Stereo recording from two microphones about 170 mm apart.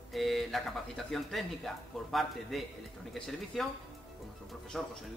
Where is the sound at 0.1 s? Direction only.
Centre (ahead or behind).